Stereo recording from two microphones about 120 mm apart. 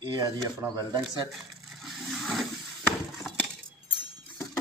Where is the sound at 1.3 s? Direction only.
Centre (ahead or behind).